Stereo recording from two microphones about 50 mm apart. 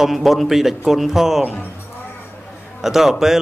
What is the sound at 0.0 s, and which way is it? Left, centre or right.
Speech, centre.